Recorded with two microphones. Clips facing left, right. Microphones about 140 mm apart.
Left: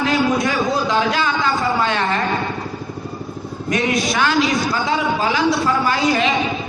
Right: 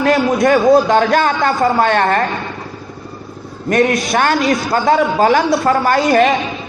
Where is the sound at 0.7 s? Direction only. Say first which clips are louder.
Right 8 dB; 55° right (ahead or behind).